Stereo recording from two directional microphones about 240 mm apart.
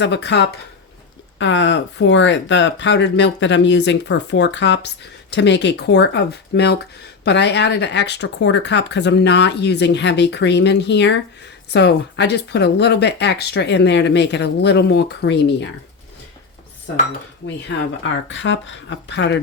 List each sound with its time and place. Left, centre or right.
0.0 s speech: left
16.9 s speech: left